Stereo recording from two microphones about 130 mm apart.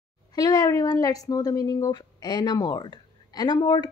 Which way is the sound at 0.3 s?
30° left (ahead or behind).